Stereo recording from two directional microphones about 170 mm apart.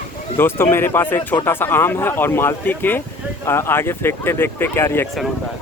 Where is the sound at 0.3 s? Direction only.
15° left (ahead or behind).